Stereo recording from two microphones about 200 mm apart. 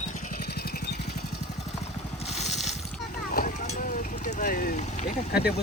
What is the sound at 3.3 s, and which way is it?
Vehicle, 40° left (ahead or behind).